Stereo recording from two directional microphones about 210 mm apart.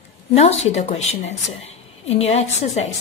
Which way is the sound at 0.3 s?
30° left (ahead or behind).